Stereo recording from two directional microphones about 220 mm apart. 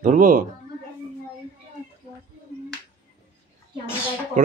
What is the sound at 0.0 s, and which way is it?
Speech, 35° right (ahead or behind).